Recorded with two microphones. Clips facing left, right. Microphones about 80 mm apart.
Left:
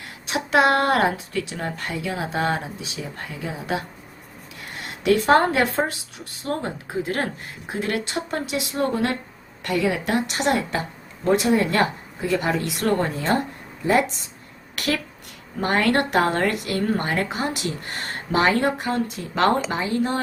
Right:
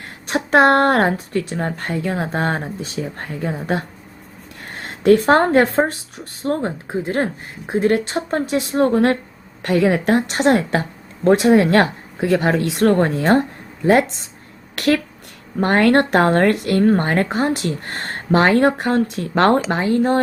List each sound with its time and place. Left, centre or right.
0.0 s child singing: right
1.1 s speech: right
14.8 s speech: right
19.8 s speech: right